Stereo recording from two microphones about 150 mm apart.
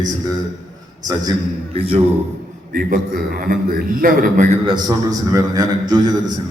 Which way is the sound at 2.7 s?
75° right (ahead or behind).